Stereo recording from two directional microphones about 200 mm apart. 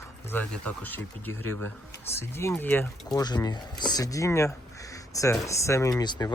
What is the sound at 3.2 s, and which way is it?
Speech, 20° left (ahead or behind).